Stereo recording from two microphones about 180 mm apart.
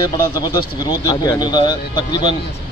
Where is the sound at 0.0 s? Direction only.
25° left (ahead or behind).